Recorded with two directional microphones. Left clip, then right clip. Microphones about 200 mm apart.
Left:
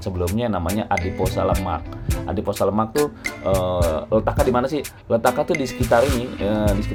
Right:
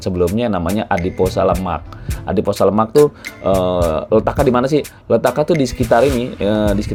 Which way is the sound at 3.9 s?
30° right (ahead or behind).